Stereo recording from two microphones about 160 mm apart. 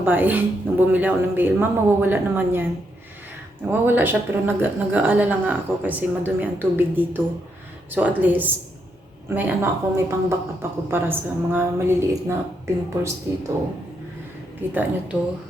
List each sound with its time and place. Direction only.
0.0 s speech: 10° right (ahead or behind)
3.7 s speech: 15° right (ahead or behind)
14.7 s speech: 10° right (ahead or behind)